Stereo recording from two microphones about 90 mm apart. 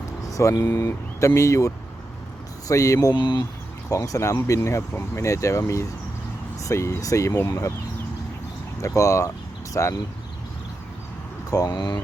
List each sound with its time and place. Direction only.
0.3 s speech: 35° left (ahead or behind)
3.2 s speech: 60° left (ahead or behind)
3.8 s speech: 40° left (ahead or behind)
9.0 s speech: 35° left (ahead or behind)
11.5 s speech: 50° left (ahead or behind)